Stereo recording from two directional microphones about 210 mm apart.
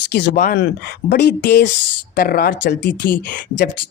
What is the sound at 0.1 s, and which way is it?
A man's voice, 55° left (ahead or behind).